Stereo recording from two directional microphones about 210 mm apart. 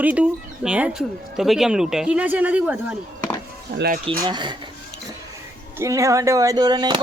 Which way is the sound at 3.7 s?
50° right (ahead or behind).